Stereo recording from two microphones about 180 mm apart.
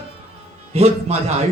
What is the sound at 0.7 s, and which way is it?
Speech, 35° right (ahead or behind).